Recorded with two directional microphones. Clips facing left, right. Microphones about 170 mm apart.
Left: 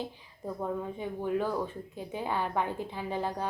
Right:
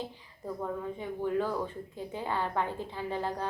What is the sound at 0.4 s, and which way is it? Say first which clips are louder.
Speech: left 1 dB; 15° left (ahead or behind).